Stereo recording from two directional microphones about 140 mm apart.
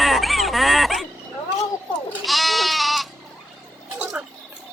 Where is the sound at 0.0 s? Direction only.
Centre (ahead or behind).